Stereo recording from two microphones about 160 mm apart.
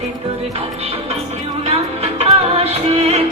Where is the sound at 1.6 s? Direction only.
40° right (ahead or behind).